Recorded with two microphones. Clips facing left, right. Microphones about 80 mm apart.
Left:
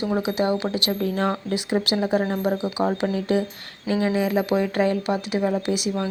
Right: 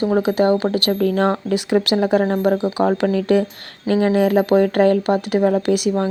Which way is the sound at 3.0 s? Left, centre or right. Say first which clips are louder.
Right 6 dB; right.